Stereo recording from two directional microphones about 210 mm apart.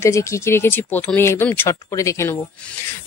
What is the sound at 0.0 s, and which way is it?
Speech, 15° left (ahead or behind).